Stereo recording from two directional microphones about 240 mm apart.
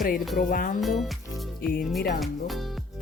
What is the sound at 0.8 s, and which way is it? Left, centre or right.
Speech, centre.